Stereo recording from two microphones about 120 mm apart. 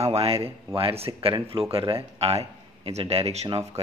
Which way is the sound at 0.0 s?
60° right (ahead or behind).